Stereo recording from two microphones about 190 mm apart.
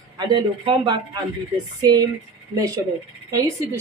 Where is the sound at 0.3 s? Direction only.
25° right (ahead or behind).